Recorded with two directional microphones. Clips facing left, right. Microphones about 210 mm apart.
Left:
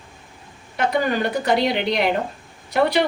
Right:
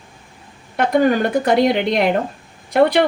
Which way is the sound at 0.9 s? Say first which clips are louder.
Right 6 dB; 50° right (ahead or behind).